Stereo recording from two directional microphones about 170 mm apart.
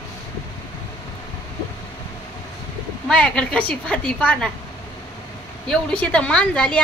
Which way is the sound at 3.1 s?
5° left (ahead or behind).